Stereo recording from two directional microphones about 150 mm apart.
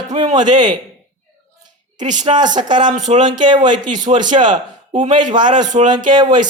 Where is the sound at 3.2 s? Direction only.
30° right (ahead or behind).